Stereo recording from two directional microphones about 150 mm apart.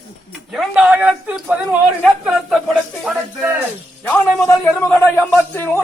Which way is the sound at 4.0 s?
10° left (ahead or behind).